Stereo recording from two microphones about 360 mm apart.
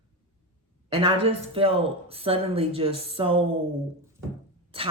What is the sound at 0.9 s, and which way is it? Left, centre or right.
A man's voice, centre.